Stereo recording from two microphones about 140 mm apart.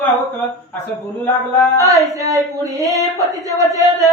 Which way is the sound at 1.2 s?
15° left (ahead or behind).